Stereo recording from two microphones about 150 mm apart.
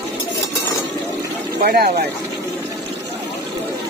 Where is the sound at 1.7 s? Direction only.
90° right.